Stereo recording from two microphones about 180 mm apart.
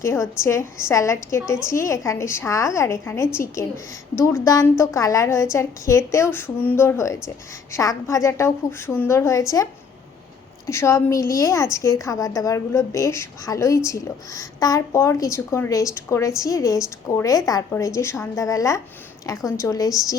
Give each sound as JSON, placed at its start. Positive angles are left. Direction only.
{"t": 0.0, "sound": "a woman's voice", "side_deg": 15}
{"t": 10.7, "sound": "a woman's voice", "side_deg": 15}